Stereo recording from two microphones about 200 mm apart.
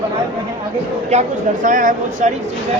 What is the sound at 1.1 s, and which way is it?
Speech, 35° right (ahead or behind).